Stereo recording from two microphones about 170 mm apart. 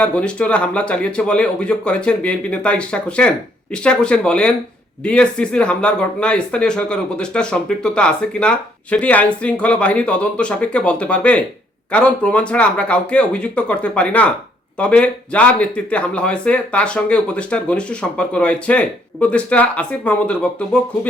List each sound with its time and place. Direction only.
0.0 s speech: 5° left (ahead or behind)